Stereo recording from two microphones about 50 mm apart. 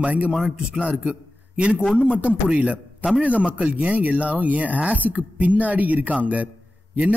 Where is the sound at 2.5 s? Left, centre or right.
Right.